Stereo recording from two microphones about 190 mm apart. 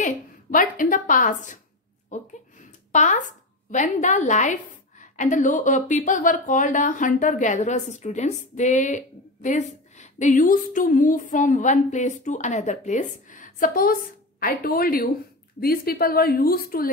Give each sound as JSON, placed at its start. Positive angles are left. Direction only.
{"t": 0.0, "sound": "a woman's voice", "side_deg": 45}